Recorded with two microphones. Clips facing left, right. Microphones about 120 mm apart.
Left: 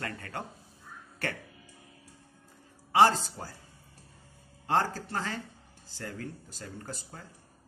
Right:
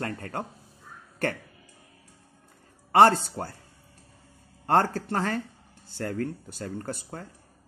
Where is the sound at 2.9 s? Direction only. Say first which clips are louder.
Right 5 dB; 55° right (ahead or behind).